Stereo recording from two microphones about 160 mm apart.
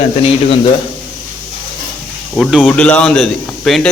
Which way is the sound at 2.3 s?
Centre (ahead or behind).